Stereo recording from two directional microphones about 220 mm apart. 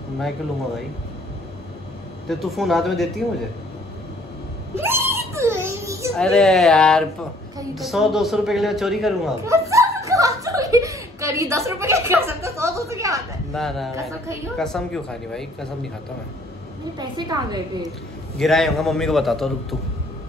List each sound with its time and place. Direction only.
2.2 s a man's voice: centre (ahead or behind)
4.7 s a sound: 10° right (ahead or behind)
6.1 s a man's voice: 5° left (ahead or behind)
9.4 s speech: 15° right (ahead or behind)
13.5 s a man's voice: centre (ahead or behind)
17.0 s a woman's voice: 20° right (ahead or behind)
18.4 s a man's voice: centre (ahead or behind)